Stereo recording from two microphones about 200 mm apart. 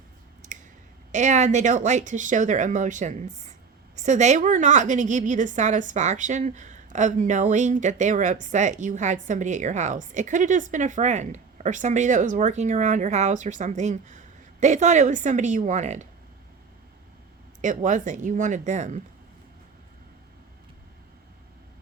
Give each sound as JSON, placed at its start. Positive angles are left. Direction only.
{"t": 1.1, "sound": "a woman's voice", "side_deg": -35}
{"t": 17.6, "sound": "a woman's voice", "side_deg": -40}